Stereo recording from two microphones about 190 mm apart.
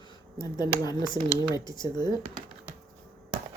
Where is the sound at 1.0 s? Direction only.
20° right (ahead or behind).